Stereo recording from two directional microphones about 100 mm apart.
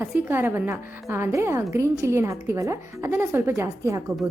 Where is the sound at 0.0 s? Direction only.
20° right (ahead or behind).